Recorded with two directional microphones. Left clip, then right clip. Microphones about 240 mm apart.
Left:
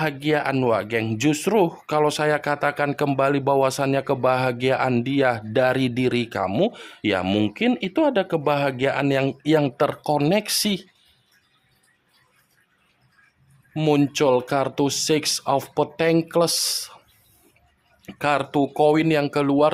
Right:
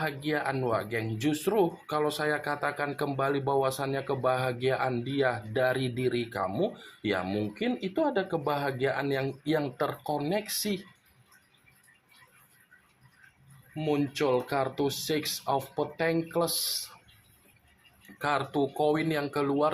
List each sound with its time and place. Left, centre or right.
0.0 s speech: left
13.7 s speech: left
18.0 s speech: left